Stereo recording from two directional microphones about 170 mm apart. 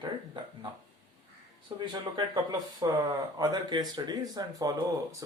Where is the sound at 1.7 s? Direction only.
25° right (ahead or behind).